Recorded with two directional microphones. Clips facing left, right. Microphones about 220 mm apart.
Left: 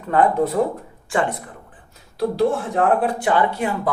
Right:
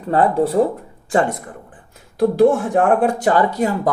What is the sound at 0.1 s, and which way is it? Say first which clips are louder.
Speech: right 2 dB; 35° right (ahead or behind).